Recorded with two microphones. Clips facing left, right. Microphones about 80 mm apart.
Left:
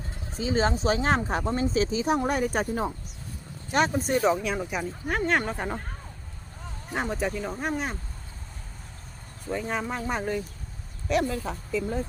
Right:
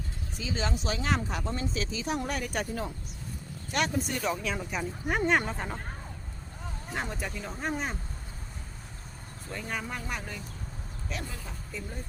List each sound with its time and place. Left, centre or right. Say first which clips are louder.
0.3 s speech: left 8 dB; left
4.4 s speech: left 4 dB; centre
5.0 s speech: left 1 dB; centre
5.5 s speech: left 5 dB; centre
6.9 s speech: left 7 dB; centre
7.5 s speech: left 3 dB; centre
9.5 s speech: left 7 dB; centre; by 10.4 s left
11.1 s speech: left 14 dB; left